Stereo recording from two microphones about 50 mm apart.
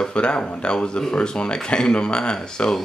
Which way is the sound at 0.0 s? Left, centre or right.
Centre.